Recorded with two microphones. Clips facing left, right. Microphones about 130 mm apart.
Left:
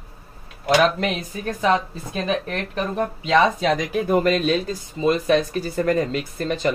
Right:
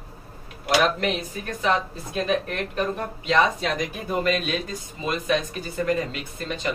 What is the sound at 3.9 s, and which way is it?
Speech, 60° left (ahead or behind).